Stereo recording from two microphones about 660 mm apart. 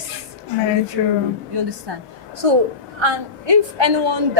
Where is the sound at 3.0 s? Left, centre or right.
Right.